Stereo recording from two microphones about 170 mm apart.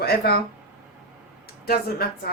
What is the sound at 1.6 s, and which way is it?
Speech, 65° left (ahead or behind).